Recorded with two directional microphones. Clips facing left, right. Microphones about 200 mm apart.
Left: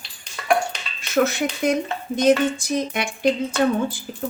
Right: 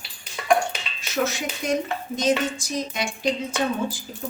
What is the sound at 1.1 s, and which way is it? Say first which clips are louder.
A woman's voice: left 6 dB; 60° left (ahead or behind).